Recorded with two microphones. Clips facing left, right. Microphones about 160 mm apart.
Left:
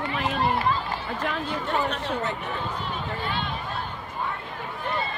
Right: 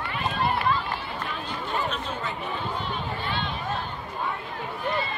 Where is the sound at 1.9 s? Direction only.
75° left (ahead or behind).